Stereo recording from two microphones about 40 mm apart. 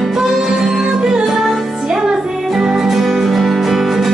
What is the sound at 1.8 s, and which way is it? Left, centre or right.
Music, centre.